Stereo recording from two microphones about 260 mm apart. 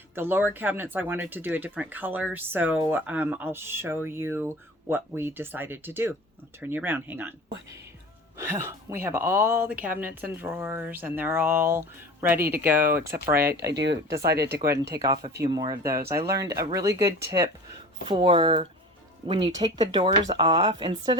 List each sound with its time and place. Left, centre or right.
0.1 s speech: centre
12.4 s speech: right
14.7 s speech: centre
17.1 s speech: right
18.1 s speech: centre